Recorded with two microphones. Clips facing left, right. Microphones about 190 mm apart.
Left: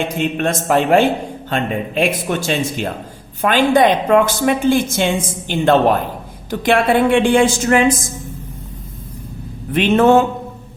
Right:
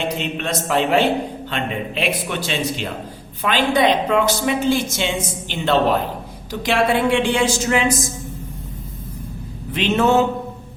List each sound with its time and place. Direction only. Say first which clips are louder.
0.0 s a man's voice: left 5 dB; 50° left (ahead or behind)
9.7 s a man's voice: left 5 dB; 55° left (ahead or behind)